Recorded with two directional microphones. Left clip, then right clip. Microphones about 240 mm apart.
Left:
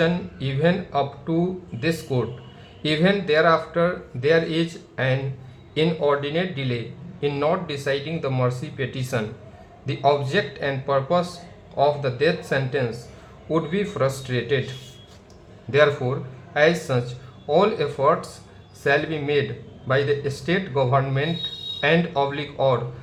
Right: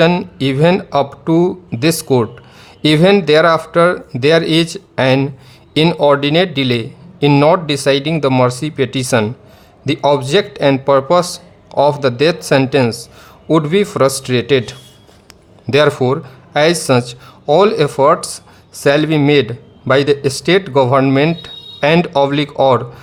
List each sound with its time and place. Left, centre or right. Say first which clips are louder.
0.0 s a man's voice: right 11 dB; right
15.7 s a man's voice: right 7 dB; right